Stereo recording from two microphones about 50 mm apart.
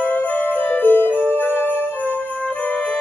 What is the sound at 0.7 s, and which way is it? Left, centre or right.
Music, left.